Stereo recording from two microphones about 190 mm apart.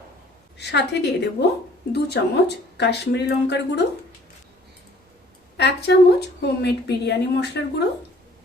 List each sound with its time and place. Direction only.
0.7 s a woman's voice: 60° left (ahead or behind)
5.5 s a woman's voice: 60° left (ahead or behind)